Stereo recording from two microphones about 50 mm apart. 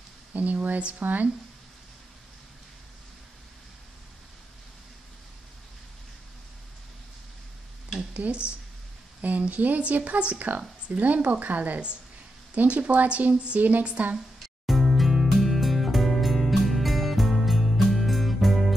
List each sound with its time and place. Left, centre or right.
0.3 s speech: right
8.1 s speech: right
14.4 s music: centre